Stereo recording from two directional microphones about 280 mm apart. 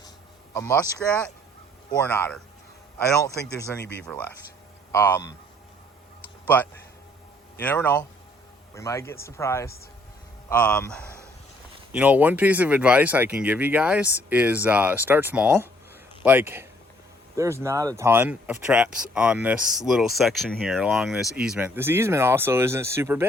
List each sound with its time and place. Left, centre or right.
0.5 s speech: centre
3.3 s speech: left
4.0 s speech: centre
6.4 s a sound: centre
7.6 s speech: centre